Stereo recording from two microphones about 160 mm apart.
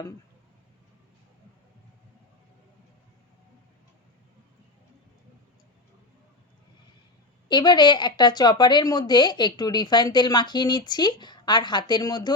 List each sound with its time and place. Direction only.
7.4 s a woman's voice: 25° left (ahead or behind)